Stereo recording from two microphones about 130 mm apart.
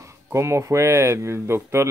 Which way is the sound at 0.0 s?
20° right (ahead or behind).